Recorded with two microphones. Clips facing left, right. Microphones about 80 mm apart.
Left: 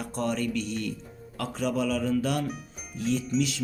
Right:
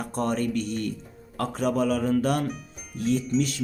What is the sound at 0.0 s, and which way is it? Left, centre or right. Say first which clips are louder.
Speech: right 3 dB; right.